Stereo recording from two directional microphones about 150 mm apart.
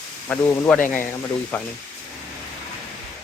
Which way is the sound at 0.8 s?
60° left (ahead or behind).